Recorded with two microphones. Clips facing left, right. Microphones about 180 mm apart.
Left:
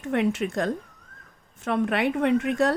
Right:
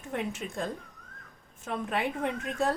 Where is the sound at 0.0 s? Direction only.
75° left (ahead or behind).